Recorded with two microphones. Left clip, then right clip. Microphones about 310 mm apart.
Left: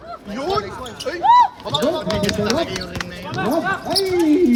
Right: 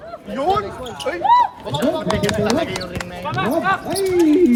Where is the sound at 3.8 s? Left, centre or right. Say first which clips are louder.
Right 1 dB; left.